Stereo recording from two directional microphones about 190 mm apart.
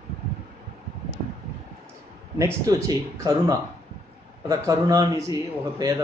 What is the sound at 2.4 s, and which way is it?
Speech, 15° right (ahead or behind).